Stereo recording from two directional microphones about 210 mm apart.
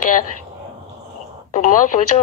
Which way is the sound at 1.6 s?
35° left (ahead or behind).